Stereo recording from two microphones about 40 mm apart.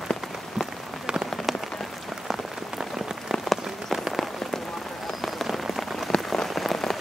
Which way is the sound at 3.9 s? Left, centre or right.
Centre.